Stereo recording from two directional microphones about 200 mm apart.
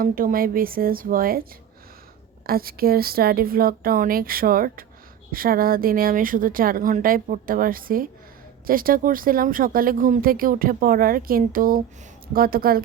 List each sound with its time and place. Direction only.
0.0 s speech: 45° right (ahead or behind)
2.5 s speech: 50° right (ahead or behind)